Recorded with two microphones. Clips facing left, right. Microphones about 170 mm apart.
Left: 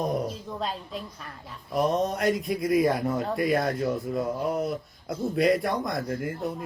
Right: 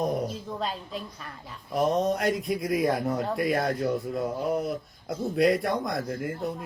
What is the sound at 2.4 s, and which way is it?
Speech, centre (ahead or behind).